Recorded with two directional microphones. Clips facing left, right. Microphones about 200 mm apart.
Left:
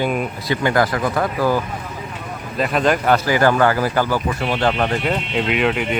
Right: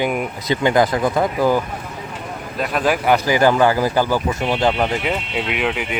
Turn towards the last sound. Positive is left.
turn(degrees=-5)  # may be behind; listen again after turning